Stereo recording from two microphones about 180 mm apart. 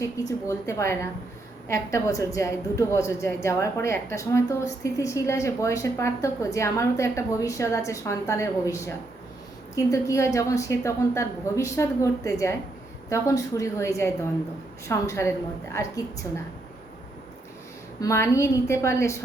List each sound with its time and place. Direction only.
0.0 s a woman's voice: 15° left (ahead or behind)
18.0 s a woman's voice: 15° left (ahead or behind)